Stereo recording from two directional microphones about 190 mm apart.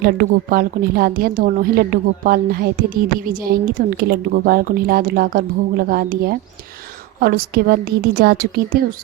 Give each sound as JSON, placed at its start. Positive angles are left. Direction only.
{"t": 0.0, "sound": "a woman's voice", "side_deg": -50}